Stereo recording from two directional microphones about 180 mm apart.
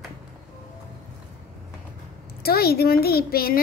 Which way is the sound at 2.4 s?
60° left (ahead or behind).